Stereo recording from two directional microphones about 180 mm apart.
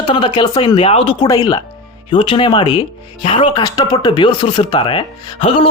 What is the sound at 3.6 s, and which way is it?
Speech, 20° left (ahead or behind).